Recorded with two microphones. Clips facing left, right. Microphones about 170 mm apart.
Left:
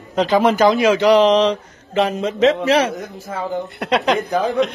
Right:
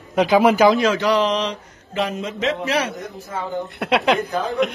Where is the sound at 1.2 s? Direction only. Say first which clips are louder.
Left 8 dB; 90° left.